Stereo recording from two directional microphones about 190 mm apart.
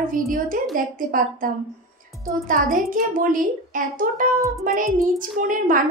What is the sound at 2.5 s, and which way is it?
A woman's voice, 45° right (ahead or behind).